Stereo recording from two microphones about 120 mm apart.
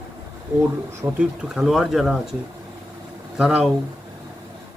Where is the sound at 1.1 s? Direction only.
5° right (ahead or behind).